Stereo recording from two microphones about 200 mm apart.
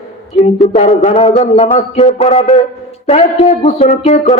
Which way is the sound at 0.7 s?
35° left (ahead or behind).